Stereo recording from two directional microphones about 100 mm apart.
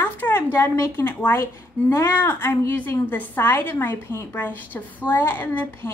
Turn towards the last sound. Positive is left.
turn(degrees=20)  # may be behind; listen again after turning